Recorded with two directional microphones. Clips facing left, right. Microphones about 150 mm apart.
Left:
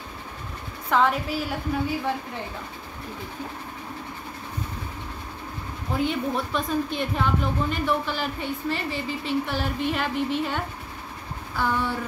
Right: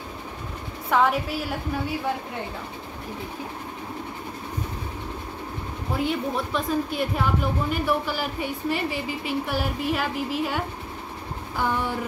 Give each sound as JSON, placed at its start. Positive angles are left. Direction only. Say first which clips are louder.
{"t": 0.8, "sound": "a woman's voice", "louder": "even", "side_deg": -5}
{"t": 5.9, "sound": "a woman's voice", "louder": "left 1 dB", "side_deg": 0}